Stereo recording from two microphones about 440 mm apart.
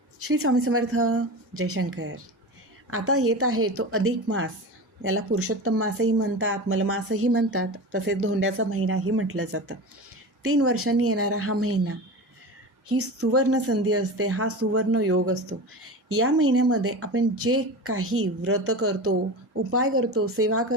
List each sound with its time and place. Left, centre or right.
0.3 s a woman's voice: right